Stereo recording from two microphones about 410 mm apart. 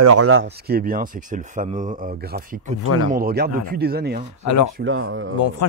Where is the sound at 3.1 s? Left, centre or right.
Right.